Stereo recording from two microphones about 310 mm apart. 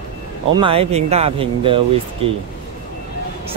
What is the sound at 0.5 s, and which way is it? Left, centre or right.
Speech, centre.